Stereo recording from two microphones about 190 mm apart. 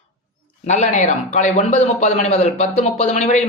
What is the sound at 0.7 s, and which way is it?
Speech, 40° left (ahead or behind).